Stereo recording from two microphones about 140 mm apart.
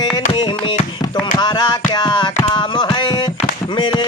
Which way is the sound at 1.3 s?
30° left (ahead or behind).